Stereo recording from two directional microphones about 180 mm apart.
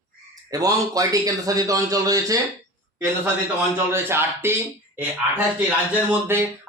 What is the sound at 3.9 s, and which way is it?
Speech, 15° right (ahead or behind).